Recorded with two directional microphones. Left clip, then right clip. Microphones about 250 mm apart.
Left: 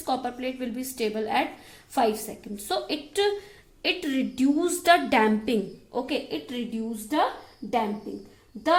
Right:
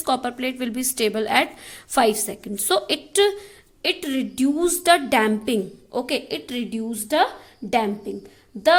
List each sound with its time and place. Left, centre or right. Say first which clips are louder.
0.0 s a woman's voice: right 5 dB; right
3.8 s a woman's voice: right 3 dB; centre; by 7.3 s right